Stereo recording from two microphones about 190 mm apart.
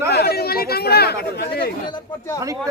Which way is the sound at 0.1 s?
55° left (ahead or behind).